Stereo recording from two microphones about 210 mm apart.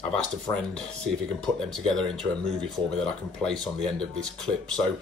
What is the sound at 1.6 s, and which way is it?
Speech, centre (ahead or behind).